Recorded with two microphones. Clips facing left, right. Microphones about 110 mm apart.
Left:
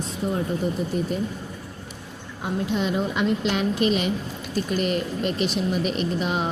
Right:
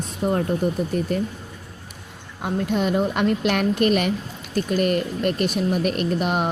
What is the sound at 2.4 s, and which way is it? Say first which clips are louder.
Speech: right 2 dB; 55° right (ahead or behind).